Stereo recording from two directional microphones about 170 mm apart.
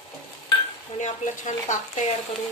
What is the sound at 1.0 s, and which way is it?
A woman's voice, 45° left (ahead or behind).